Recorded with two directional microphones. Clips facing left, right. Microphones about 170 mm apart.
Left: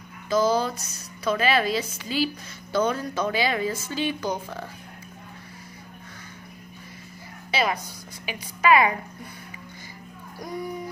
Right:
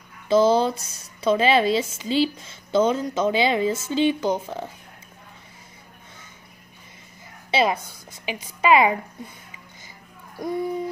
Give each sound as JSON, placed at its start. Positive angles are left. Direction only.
{"t": 0.3, "sound": "a sound", "side_deg": -25}
{"t": 0.8, "sound": "speech", "side_deg": -25}
{"t": 7.5, "sound": "speech", "side_deg": -25}
{"t": 10.4, "sound": "speech", "side_deg": -25}